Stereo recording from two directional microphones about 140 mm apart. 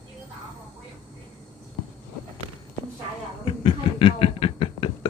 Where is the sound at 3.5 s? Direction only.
40° left (ahead or behind).